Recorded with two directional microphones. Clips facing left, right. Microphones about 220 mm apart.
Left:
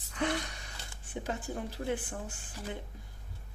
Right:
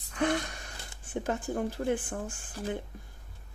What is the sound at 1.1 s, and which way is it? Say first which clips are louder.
Speech: right 5 dB; 50° right (ahead or behind).